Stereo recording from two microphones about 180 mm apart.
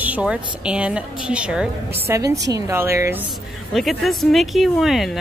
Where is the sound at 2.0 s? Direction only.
20° right (ahead or behind).